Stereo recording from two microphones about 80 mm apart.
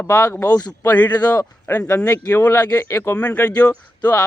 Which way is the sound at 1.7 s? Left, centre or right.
Left.